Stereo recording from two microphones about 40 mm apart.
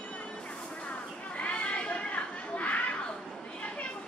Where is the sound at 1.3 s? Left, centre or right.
Left.